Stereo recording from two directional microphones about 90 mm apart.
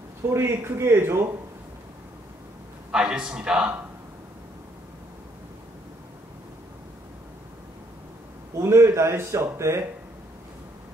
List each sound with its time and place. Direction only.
0.3 s speech: 25° right (ahead or behind)
2.9 s a man's voice: 10° right (ahead or behind)
8.5 s speech: 30° right (ahead or behind)